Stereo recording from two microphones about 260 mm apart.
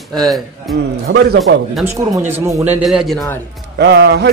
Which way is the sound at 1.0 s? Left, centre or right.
Right.